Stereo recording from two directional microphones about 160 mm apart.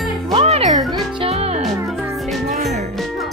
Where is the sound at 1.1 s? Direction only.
35° right (ahead or behind).